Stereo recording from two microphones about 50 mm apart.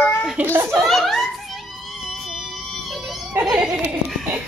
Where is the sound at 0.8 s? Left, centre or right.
Centre.